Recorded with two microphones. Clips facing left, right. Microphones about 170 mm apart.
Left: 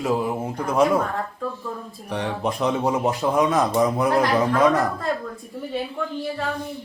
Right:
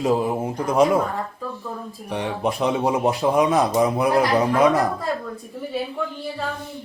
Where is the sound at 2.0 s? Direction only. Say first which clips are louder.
Right 1 dB; 10° right (ahead or behind).